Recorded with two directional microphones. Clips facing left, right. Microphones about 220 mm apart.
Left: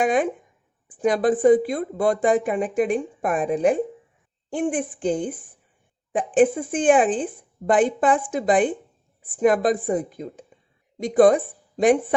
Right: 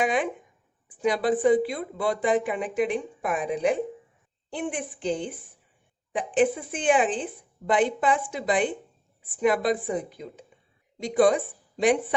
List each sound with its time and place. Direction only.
0.0 s speech: 50° left (ahead or behind)